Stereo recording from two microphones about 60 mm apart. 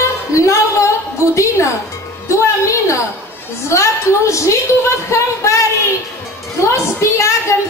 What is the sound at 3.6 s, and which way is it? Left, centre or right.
A woman's voice, left.